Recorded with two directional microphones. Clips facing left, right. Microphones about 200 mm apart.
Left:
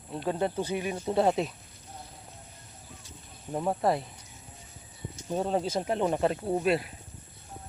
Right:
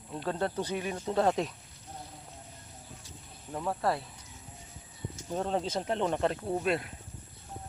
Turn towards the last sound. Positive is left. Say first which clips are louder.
# left 3 dB
turn(degrees=5)  # may be behind; listen again after turning